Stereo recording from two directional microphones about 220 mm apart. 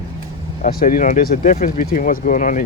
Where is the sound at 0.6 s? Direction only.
40° left (ahead or behind).